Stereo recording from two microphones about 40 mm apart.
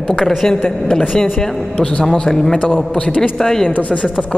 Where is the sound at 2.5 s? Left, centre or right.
Left.